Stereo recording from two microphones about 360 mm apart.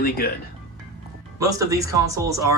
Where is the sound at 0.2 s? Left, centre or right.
Left.